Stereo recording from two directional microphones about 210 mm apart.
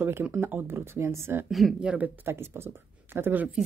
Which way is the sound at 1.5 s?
Centre (ahead or behind).